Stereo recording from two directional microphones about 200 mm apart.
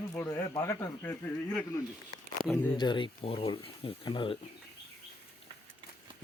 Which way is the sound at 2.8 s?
25° left (ahead or behind).